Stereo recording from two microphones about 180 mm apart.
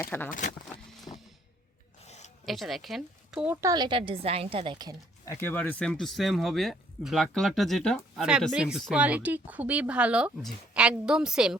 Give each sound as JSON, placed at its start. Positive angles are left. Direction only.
{"t": 0.0, "sound": "speech", "side_deg": 10}
{"t": 0.3, "sound": "speech", "side_deg": 45}
{"t": 2.0, "sound": "zipper", "side_deg": 40}
{"t": 2.5, "sound": "a woman's voice", "side_deg": 0}
{"t": 5.2, "sound": "speech", "side_deg": 15}